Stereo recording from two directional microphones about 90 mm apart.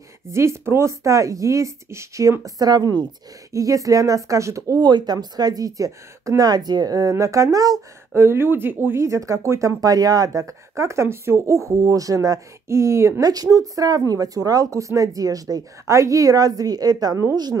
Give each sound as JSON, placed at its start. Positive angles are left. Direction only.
{"t": 0.3, "sound": "speech", "side_deg": -30}
{"t": 4.8, "sound": "speech", "side_deg": -50}
{"t": 8.1, "sound": "speech", "side_deg": -25}
{"t": 13.3, "sound": "speech", "side_deg": -45}